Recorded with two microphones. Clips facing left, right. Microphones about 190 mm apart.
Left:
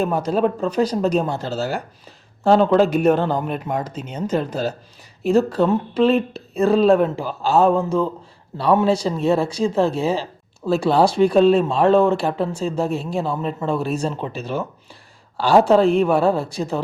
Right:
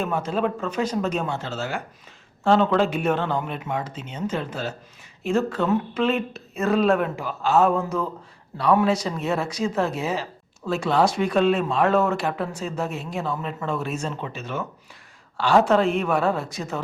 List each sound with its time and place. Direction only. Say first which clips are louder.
0.0 s speech: left 5 dB; 40° left (ahead or behind)